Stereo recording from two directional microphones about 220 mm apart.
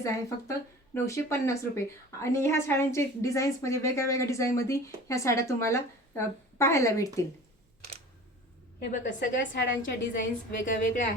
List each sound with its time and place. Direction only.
0.0 s a woman's voice: 15° left (ahead or behind)
8.9 s a woman's voice: 35° left (ahead or behind)
9.4 s a woman's voice: 55° left (ahead or behind)
10.6 s a woman's voice: 35° left (ahead or behind)